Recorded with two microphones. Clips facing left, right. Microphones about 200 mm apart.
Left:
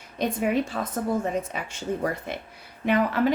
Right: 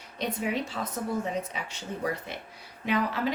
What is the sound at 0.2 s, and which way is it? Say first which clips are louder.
Speech: left 6 dB; 50° left (ahead or behind).